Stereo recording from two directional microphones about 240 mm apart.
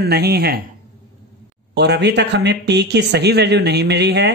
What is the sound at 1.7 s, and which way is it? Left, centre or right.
Speech, right.